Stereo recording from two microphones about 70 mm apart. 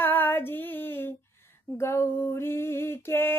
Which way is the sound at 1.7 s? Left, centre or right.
Left.